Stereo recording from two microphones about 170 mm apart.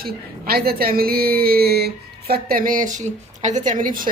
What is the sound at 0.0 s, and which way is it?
A woman's voice, 60° right (ahead or behind).